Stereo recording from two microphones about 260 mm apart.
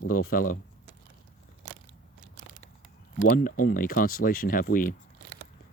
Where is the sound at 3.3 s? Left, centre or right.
Left.